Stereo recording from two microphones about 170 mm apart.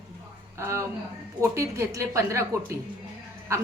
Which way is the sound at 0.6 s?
15° right (ahead or behind).